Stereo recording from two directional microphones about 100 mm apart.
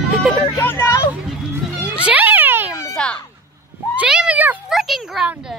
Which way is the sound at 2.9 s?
10° left (ahead or behind).